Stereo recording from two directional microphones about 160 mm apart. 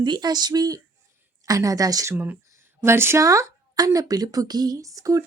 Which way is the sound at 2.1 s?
10° right (ahead or behind).